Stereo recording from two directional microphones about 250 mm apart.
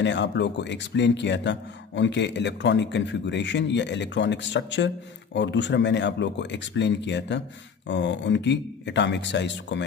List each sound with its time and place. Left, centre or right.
0.0 s a man's voice: left